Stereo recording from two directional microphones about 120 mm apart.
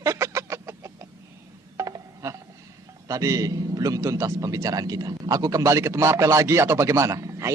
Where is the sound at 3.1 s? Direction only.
30° right (ahead or behind).